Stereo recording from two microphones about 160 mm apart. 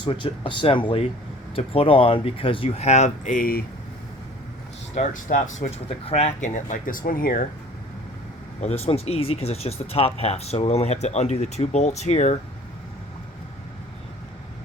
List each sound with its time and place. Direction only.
0.0 s speech: 30° left (ahead or behind); by 3.6 s 60° left (ahead or behind)
4.9 s speech: 50° left (ahead or behind)
8.6 s speech: 40° left (ahead or behind)